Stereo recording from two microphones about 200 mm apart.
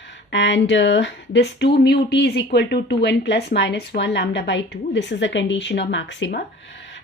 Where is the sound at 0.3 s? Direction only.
65° left (ahead or behind).